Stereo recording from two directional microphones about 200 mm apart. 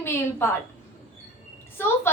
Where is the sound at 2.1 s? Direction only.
10° left (ahead or behind).